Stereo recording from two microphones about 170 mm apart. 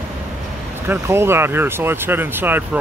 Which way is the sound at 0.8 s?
15° right (ahead or behind).